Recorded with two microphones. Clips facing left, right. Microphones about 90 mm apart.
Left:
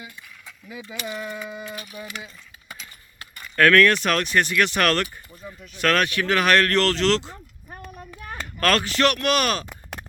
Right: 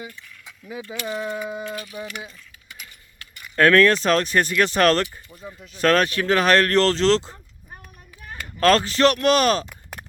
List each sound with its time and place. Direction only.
1.0 s speech: 35° right (ahead or behind)
3.5 s speech: 30° right (ahead or behind)
8.6 s speech: 30° right (ahead or behind)